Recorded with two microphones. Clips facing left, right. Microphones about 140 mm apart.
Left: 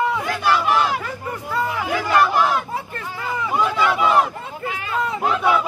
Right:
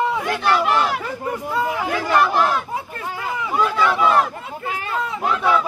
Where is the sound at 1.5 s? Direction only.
15° right (ahead or behind).